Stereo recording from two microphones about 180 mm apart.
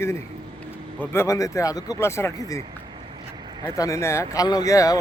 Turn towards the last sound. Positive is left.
turn(degrees=20)  # may be behind; listen again after turning